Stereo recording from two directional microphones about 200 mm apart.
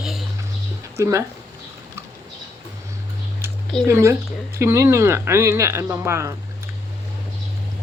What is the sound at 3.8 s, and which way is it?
Speech, 10° right (ahead or behind).